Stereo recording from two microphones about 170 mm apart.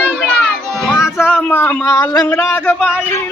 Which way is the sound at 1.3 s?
10° left (ahead or behind).